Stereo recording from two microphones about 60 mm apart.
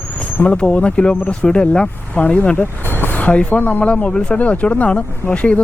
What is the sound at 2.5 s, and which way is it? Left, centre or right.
Speech, left.